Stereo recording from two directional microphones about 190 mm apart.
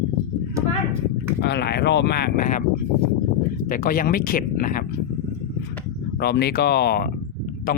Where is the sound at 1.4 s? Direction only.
60° left (ahead or behind).